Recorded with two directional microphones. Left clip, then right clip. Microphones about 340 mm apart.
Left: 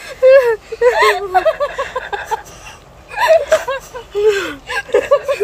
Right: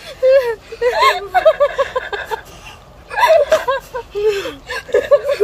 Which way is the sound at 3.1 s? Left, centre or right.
Centre.